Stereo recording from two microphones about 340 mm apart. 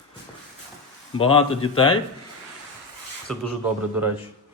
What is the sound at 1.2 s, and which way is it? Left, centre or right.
Speech, centre.